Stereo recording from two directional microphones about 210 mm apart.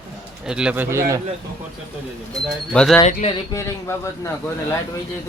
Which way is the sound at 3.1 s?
35° left (ahead or behind).